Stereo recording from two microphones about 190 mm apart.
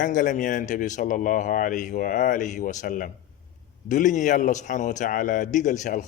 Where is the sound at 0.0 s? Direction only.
45° left (ahead or behind).